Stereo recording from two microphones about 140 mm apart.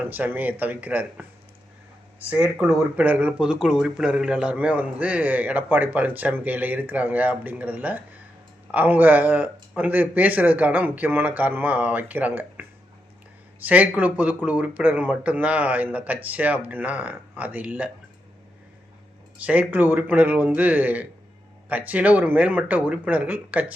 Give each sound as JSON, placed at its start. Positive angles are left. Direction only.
{"t": 0.0, "sound": "speech", "side_deg": -10}
{"t": 2.3, "sound": "speech", "side_deg": -10}
{"t": 19.5, "sound": "speech", "side_deg": -10}